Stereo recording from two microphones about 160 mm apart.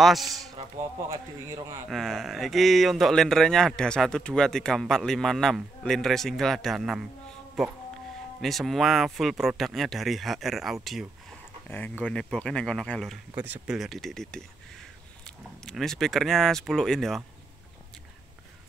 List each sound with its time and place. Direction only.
0.0 s speech: centre (ahead or behind)
1.9 s speech: centre (ahead or behind)
11.7 s speech: 10° left (ahead or behind)
13.3 s speech: 10° right (ahead or behind)